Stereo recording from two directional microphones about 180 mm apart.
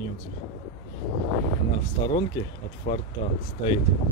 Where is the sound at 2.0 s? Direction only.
25° left (ahead or behind).